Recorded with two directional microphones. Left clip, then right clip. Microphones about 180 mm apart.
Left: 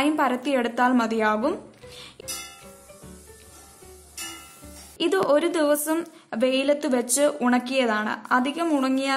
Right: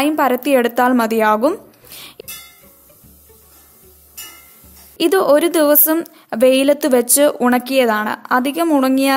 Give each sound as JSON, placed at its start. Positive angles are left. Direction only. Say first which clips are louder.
{"t": 0.0, "sound": "a woman's voice", "louder": "right 7 dB", "side_deg": -35}
{"t": 4.9, "sound": "a woman's voice", "louder": "right 8 dB", "side_deg": -35}